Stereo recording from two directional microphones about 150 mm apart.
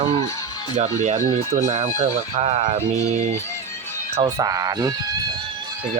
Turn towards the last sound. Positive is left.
turn(degrees=-25)  # may be behind; listen again after turning